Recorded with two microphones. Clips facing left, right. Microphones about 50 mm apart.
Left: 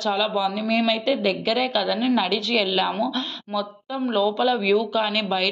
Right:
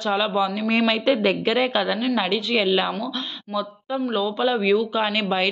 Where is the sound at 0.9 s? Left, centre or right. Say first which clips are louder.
Right 2 dB; right.